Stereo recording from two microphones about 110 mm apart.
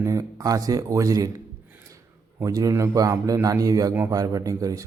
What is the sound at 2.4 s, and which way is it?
Speech, 30° right (ahead or behind).